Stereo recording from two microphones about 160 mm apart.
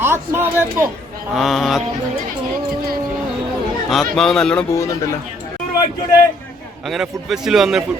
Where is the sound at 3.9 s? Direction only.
5° left (ahead or behind).